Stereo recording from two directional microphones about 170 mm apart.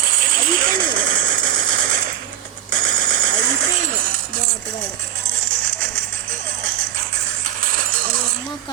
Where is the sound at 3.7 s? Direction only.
50° right (ahead or behind).